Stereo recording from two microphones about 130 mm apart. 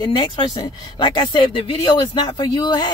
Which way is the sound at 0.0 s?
40° left (ahead or behind).